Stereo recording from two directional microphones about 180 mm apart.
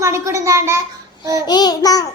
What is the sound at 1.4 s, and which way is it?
Speech, 20° left (ahead or behind).